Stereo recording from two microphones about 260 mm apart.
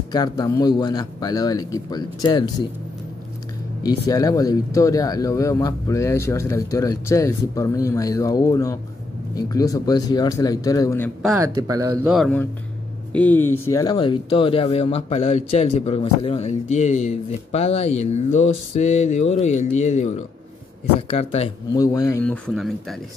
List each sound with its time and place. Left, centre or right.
0.1 s speech: centre
3.8 s speech: centre
11.3 s speech: centre
12.1 s speech: centre; by 21.8 s left
21.8 s speech: centre